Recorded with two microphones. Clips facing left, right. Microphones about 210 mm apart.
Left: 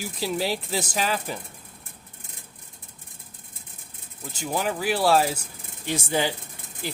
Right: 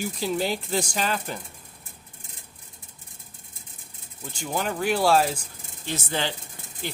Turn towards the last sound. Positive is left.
turn(degrees=5)  # may be behind; listen again after turning